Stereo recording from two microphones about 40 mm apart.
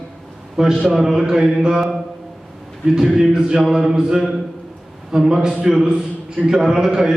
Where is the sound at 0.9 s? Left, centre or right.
Centre.